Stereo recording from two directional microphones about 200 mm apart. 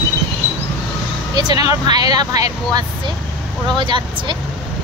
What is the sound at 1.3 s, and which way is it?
Speech, 20° right (ahead or behind).